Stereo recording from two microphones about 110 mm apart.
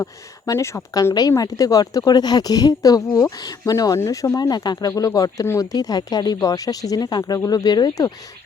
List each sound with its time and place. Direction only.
0.4 s speech: 25° left (ahead or behind)